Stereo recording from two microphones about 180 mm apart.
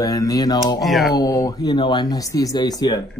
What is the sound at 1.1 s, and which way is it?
Speech, 20° left (ahead or behind).